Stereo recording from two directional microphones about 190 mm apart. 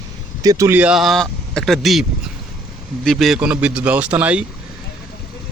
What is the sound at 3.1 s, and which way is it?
Speech, centre (ahead or behind).